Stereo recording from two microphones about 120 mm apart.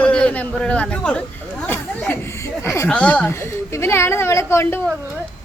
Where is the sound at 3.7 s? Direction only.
20° left (ahead or behind).